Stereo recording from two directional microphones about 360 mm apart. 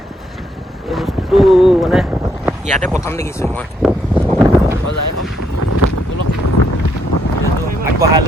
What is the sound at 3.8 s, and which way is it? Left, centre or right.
Vehicle, centre.